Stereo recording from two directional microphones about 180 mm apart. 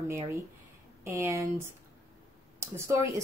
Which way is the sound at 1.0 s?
15° right (ahead or behind).